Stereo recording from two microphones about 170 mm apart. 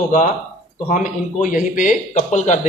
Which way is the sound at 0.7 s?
50° left (ahead or behind).